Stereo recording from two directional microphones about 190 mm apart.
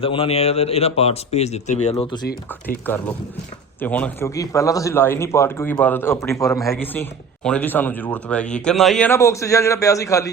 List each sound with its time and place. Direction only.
0.0 s speech: 30° left (ahead or behind)
2.6 s speech: 10° left (ahead or behind)